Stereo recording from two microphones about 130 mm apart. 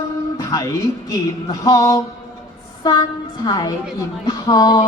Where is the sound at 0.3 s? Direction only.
30° left (ahead or behind).